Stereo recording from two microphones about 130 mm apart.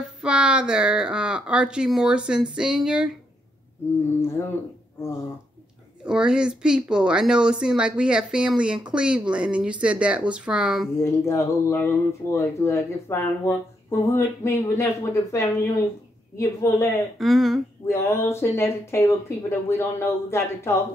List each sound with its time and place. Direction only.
0.2 s speech: 5° right (ahead or behind)
6.0 s speech: 5° right (ahead or behind)
11.0 s speech: 20° left (ahead or behind)
17.2 s speech: centre (ahead or behind)
17.8 s speech: 20° left (ahead or behind)